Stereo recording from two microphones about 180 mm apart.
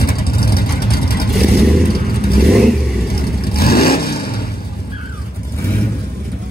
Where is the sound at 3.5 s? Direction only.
60° left (ahead or behind).